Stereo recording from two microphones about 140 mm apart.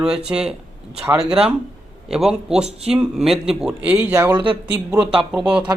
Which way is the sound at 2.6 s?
45° right (ahead or behind).